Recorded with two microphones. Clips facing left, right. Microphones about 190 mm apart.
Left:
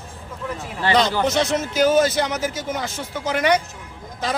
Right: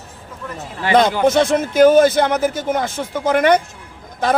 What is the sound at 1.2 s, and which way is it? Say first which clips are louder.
A man's voice: right 6 dB; 55° right (ahead or behind).